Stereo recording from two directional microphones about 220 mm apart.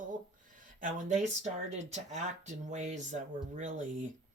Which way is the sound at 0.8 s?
35° right (ahead or behind).